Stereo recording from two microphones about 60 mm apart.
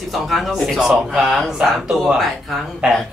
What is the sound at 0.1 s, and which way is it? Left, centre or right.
A man's voice, centre.